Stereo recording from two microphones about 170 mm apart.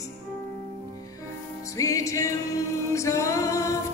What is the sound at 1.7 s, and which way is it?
Music, 20° left (ahead or behind).